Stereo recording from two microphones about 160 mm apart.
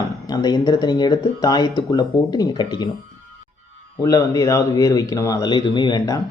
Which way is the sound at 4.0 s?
20° left (ahead or behind).